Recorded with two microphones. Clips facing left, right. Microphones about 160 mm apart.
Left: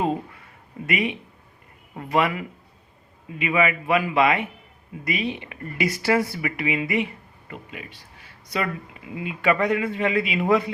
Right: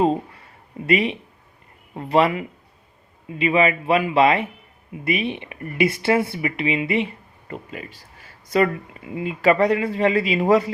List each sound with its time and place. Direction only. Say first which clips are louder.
0.0 s a sound: right 5 dB; 30° right (ahead or behind)
0.9 s a man's voice: right 5 dB; 30° right (ahead or behind)
5.0 s speech: right 3 dB; 25° right (ahead or behind)
7.5 s a man's voice: right 5 dB; 40° right (ahead or behind)
9.1 s a man's voice: right 4 dB; 35° right (ahead or behind)